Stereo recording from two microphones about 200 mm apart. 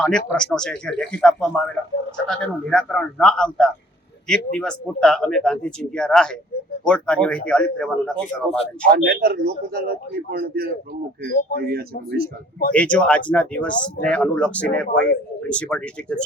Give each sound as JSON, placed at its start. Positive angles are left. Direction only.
{"t": 0.0, "sound": "speech", "side_deg": 5}
{"t": 8.9, "sound": "a man's voice", "side_deg": -50}
{"t": 12.7, "sound": "speech", "side_deg": 5}